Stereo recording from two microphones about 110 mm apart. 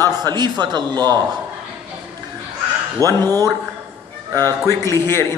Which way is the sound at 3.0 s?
30° right (ahead or behind).